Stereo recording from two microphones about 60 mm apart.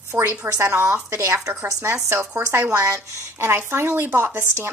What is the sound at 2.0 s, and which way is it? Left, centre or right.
A woman's voice, right.